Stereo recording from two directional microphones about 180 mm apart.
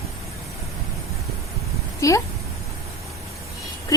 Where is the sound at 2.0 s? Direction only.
20° left (ahead or behind).